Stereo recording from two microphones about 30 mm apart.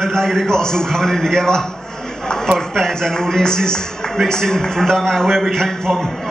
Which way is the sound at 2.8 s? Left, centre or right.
Centre.